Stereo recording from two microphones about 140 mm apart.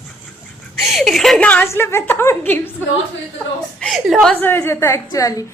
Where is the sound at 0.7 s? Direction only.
Centre (ahead or behind); by 2.7 s 15° left (ahead or behind).